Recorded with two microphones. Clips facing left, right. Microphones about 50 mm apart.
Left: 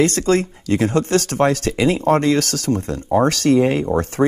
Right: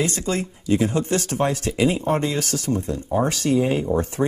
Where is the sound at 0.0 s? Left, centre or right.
Left.